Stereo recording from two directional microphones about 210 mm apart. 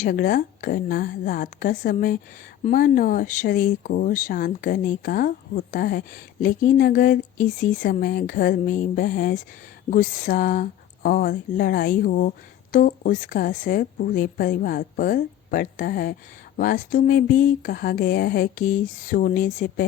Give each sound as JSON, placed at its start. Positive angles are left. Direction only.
{"t": 0.0, "sound": "a woman's voice", "side_deg": 40}